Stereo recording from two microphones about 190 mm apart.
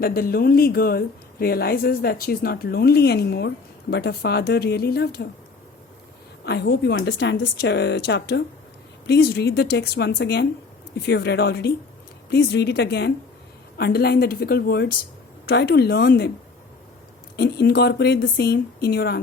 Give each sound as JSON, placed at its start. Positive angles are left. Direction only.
{"t": 0.0, "sound": "speech", "side_deg": 50}
{"t": 6.4, "sound": "speech", "side_deg": 60}
{"t": 17.3, "sound": "speech", "side_deg": 60}